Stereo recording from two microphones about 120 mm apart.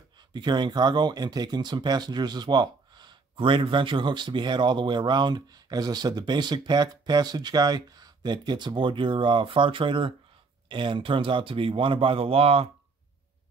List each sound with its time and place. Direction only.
0.3 s speech: 40° right (ahead or behind)